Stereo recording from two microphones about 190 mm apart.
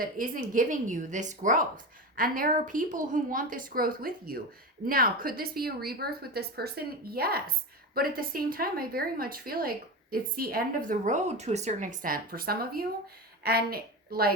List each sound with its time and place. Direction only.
0.0 s a woman's voice: 50° right (ahead or behind)